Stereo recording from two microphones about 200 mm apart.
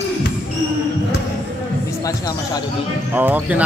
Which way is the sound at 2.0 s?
20° left (ahead or behind).